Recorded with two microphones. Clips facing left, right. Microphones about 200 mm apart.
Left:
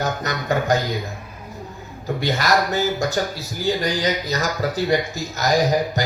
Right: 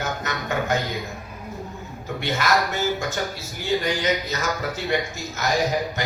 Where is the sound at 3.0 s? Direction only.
35° left (ahead or behind).